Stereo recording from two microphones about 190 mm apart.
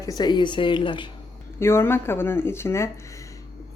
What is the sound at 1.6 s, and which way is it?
Speech, 15° left (ahead or behind).